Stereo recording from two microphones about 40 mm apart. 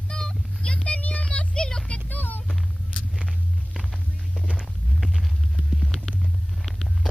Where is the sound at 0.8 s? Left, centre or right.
Left.